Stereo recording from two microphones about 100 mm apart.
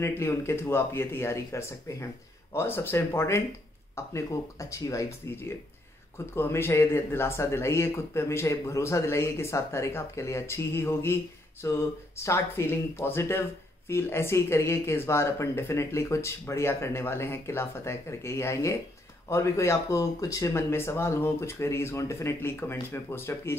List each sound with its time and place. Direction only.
0.0 s speech: 25° left (ahead or behind)